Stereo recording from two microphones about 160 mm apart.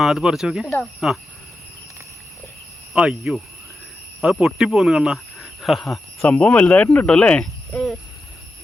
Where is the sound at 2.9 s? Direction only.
5° right (ahead or behind).